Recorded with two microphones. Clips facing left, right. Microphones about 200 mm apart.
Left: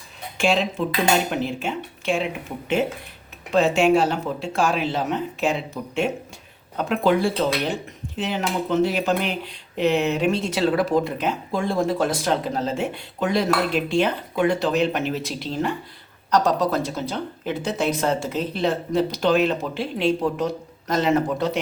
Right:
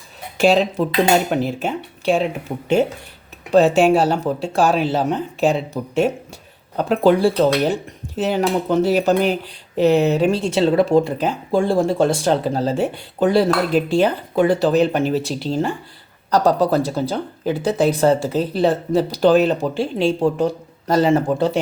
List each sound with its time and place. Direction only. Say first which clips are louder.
0.3 s speech: right 6 dB; 40° right (ahead or behind)